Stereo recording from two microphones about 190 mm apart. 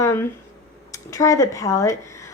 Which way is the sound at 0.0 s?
15° left (ahead or behind).